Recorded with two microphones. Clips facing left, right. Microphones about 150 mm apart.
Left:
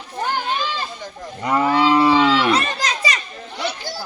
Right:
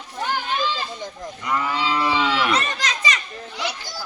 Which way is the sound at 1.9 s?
40° left (ahead or behind).